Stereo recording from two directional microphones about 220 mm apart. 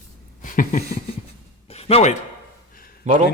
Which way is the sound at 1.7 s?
25° left (ahead or behind).